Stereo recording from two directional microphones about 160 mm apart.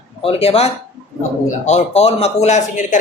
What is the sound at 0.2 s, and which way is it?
A man's voice, 35° left (ahead or behind).